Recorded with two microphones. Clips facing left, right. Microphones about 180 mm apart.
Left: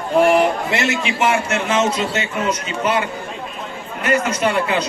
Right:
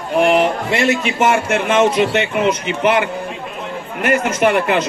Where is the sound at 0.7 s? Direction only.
45° right (ahead or behind).